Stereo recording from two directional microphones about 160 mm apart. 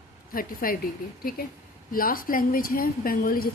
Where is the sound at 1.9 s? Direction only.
65° left (ahead or behind).